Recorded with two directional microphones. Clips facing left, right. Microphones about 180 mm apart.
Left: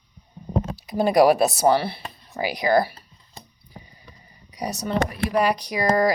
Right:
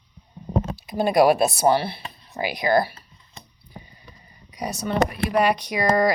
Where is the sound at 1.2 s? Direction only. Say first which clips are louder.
Left 1 dB; 40° left (ahead or behind).